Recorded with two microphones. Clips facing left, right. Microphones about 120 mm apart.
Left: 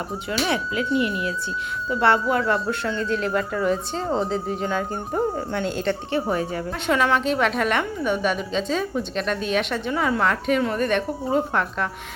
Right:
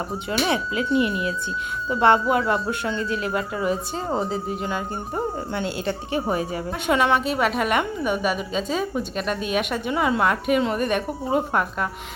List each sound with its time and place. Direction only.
0.3 s a woman's voice: 25° right (ahead or behind); by 11.9 s 10° right (ahead or behind)